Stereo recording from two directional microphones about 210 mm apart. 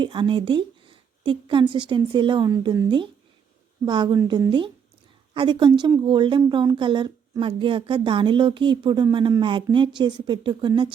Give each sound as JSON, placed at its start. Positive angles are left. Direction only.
{"t": 0.0, "sound": "speech", "side_deg": -25}